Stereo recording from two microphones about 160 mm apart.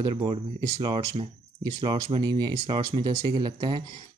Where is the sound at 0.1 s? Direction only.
30° right (ahead or behind).